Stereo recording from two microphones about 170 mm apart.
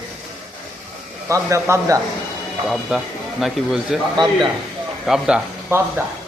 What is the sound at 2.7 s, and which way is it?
Speech, centre (ahead or behind).